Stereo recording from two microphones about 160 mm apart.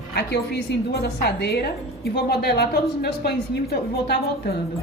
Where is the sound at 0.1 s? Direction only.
90° left.